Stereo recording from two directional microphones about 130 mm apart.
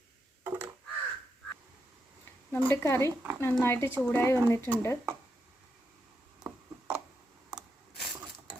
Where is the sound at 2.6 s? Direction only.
20° left (ahead or behind).